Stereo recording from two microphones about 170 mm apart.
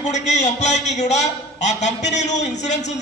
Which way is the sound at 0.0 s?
45° left (ahead or behind).